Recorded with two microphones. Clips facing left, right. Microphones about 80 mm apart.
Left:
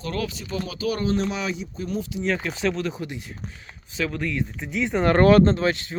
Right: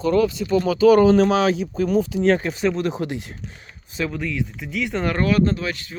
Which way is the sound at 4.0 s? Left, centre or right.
Right.